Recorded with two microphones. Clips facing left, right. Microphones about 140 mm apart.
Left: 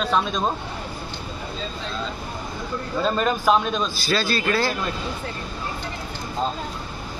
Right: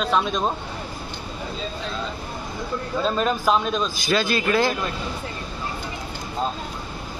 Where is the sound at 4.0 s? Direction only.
20° right (ahead or behind).